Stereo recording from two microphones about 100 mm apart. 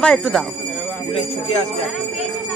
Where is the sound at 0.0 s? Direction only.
10° left (ahead or behind).